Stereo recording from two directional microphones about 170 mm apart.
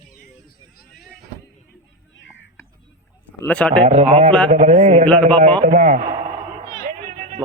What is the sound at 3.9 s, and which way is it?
A man's voice, 40° right (ahead or behind).